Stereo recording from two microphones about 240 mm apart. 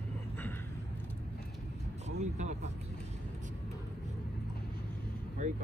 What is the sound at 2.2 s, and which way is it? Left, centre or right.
Vehicle, right.